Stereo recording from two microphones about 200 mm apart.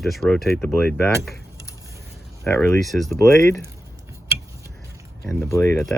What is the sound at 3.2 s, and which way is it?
Speech, 15° left (ahead or behind).